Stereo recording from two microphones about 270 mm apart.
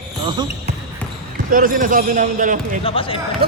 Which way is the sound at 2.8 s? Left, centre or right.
Centre.